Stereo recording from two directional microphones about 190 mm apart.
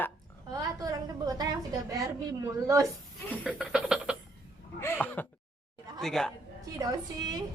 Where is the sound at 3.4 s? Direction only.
5° right (ahead or behind).